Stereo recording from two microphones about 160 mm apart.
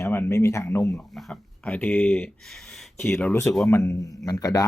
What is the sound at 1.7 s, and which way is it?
Speech, 10° left (ahead or behind).